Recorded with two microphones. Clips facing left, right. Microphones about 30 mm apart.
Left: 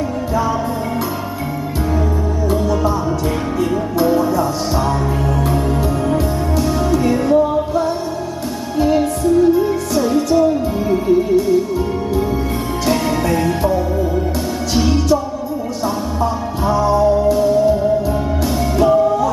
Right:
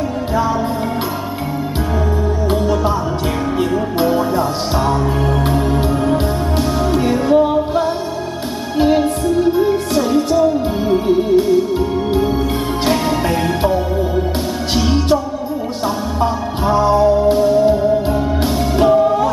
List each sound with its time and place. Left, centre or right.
2.5 s music: right
4.0 s music: right
6.0 s music: right
9.4 s music: right
12.8 s music: right
16.6 s music: right